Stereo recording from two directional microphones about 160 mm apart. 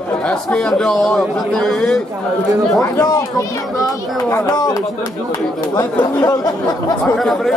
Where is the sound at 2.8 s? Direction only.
20° left (ahead or behind).